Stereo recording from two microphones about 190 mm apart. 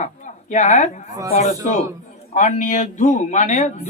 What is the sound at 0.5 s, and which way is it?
A man's voice, 40° left (ahead or behind).